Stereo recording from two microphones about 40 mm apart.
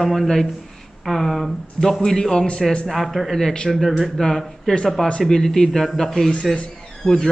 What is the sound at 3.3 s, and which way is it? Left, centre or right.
A woman's voice, centre.